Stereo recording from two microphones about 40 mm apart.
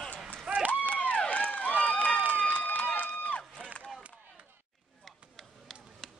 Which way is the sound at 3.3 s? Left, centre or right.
Left.